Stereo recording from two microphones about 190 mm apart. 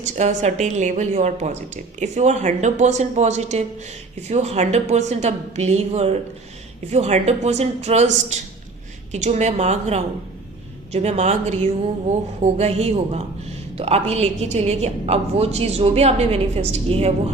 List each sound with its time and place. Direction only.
0.0 s a woman's voice: 40° right (ahead or behind)